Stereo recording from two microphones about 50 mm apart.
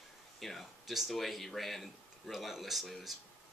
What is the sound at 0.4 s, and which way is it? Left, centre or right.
Speech, centre.